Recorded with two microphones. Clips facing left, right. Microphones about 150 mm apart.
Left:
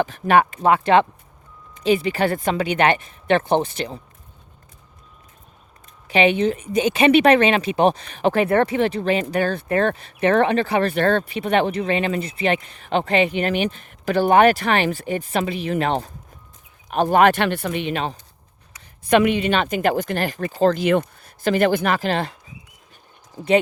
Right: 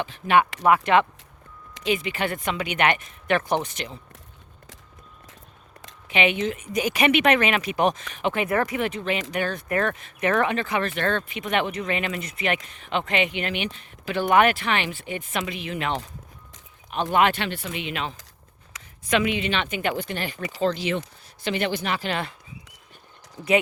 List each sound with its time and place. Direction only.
0.0 s speech: 40° left (ahead or behind)
0.6 s speech: 30° left (ahead or behind)
6.1 s speech: 35° left (ahead or behind); by 17.7 s 60° left (ahead or behind)
17.7 s speech: 40° left (ahead or behind)
18.7 s a sound: 90° right
19.1 s speech: 50° left (ahead or behind)